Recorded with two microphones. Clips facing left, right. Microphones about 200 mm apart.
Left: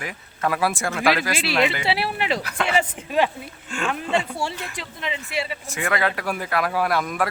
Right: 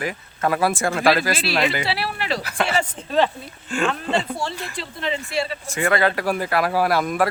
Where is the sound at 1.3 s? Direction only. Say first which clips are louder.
Even; 15° left (ahead or behind).